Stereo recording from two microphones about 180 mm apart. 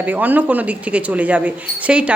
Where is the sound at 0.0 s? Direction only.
10° right (ahead or behind).